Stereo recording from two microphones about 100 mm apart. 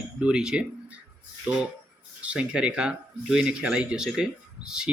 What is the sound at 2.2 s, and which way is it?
Speech, 10° right (ahead or behind).